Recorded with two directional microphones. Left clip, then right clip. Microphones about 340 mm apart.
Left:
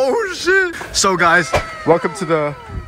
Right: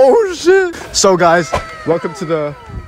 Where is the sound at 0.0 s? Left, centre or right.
Centre.